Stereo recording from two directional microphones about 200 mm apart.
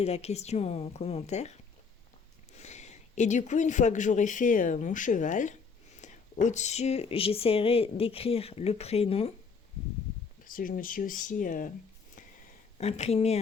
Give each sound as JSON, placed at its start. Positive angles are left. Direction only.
{"t": 0.0, "sound": "a woman's voice", "side_deg": 30}
{"t": 2.6, "sound": "speech", "side_deg": 35}
{"t": 10.4, "sound": "speech", "side_deg": 45}
{"t": 12.8, "sound": "a woman's voice", "side_deg": 30}